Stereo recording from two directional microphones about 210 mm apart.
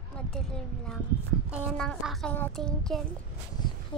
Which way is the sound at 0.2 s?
5° left (ahead or behind).